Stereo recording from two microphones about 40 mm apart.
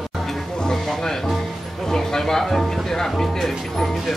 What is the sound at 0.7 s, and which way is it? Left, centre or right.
Music, centre.